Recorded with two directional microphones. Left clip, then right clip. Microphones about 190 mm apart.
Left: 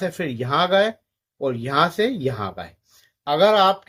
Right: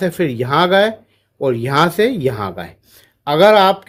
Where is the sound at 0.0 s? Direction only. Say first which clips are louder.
Right 8 dB; 55° right (ahead or behind).